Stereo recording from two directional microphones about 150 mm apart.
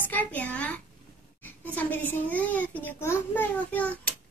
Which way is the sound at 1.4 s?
10° left (ahead or behind).